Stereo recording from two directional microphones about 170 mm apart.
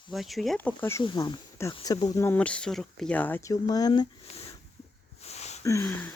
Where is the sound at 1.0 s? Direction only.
25° left (ahead or behind).